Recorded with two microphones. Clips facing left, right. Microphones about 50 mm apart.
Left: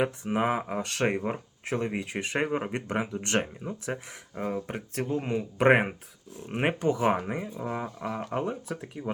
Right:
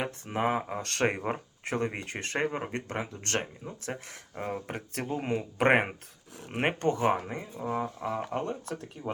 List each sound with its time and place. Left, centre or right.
0.0 s speech: centre
4.7 s speech: centre
6.7 s speech: centre
7.9 s speech: centre